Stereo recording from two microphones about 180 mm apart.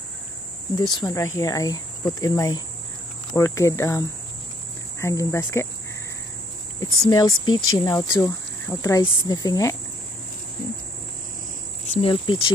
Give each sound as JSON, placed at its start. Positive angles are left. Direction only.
{"t": 0.9, "sound": "speech", "side_deg": 20}
{"t": 5.0, "sound": "speech", "side_deg": 15}
{"t": 6.8, "sound": "speech", "side_deg": 20}
{"t": 11.8, "sound": "cricket", "side_deg": 35}